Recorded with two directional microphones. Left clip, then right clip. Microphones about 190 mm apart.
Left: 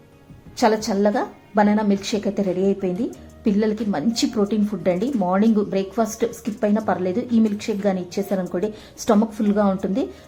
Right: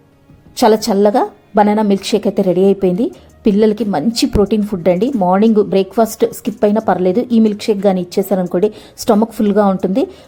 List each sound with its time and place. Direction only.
0.5 s a woman's voice: 35° right (ahead or behind)